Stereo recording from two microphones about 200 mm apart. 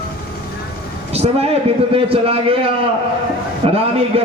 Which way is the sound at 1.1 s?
30° right (ahead or behind).